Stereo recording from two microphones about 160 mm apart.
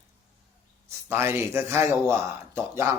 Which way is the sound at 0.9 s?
15° right (ahead or behind).